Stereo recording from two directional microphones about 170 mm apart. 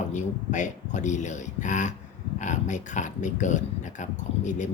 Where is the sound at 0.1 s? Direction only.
45° left (ahead or behind).